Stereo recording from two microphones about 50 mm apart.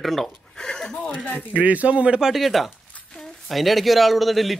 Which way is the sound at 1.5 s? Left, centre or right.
Right.